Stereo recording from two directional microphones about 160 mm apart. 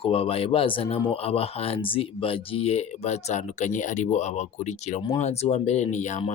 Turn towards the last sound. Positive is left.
turn(degrees=50)  # may be behind; listen again after turning